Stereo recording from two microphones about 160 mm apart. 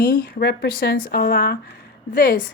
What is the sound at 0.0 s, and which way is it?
Speech, 70° left (ahead or behind).